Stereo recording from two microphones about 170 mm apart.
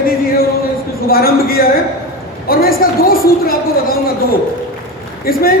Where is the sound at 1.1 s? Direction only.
60° left (ahead or behind).